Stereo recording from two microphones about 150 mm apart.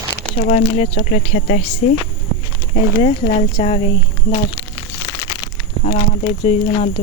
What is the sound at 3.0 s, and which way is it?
Speech, 50° left (ahead or behind).